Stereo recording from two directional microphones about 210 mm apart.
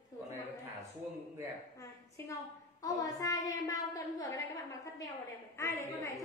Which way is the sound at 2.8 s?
15° left (ahead or behind).